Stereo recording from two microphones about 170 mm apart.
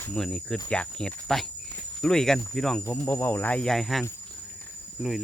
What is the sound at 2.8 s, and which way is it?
Speech, 15° left (ahead or behind).